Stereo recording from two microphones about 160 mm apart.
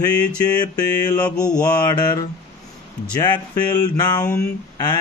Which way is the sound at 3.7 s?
25° left (ahead or behind).